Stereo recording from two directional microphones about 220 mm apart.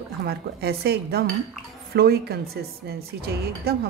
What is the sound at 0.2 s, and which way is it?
Speech, 45° right (ahead or behind).